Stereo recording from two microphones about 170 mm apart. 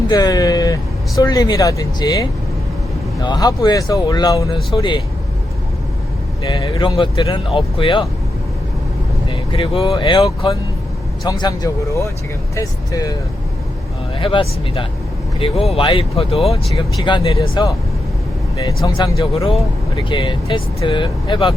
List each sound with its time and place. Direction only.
0.1 s speech: 20° left (ahead or behind)
6.5 s speech: 25° left (ahead or behind)
9.3 s speech: 30° left (ahead or behind)
14.2 s speech: 30° left (ahead or behind)